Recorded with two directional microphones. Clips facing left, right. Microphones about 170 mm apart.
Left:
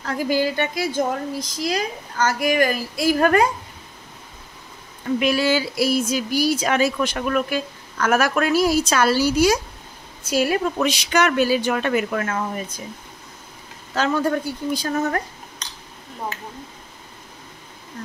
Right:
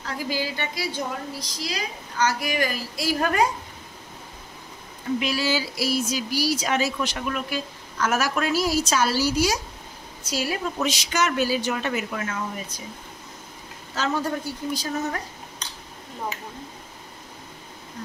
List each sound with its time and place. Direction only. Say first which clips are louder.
0.0 s a woman's voice: left 7 dB; 50° left (ahead or behind)
5.2 s speech: left 8 dB; 55° left (ahead or behind)
14.0 s speech: left 5 dB; 60° left (ahead or behind)